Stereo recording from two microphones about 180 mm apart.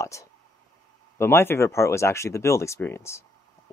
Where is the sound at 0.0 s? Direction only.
15° left (ahead or behind).